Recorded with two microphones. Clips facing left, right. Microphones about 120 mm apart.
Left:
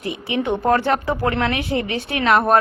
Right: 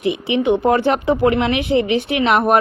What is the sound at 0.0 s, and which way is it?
A woman's voice, 20° right (ahead or behind).